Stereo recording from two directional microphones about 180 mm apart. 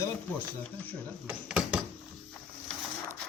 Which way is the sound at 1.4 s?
5° right (ahead or behind).